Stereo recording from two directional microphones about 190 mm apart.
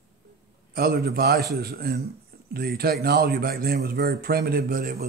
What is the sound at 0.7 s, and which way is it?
A man's voice, 50° right (ahead or behind).